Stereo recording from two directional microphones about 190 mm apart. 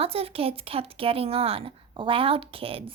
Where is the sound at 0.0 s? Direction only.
30° right (ahead or behind).